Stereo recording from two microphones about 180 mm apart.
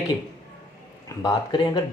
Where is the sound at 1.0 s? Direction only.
20° left (ahead or behind).